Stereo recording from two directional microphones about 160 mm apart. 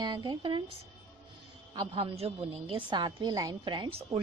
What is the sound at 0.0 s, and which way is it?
Speech, 30° right (ahead or behind).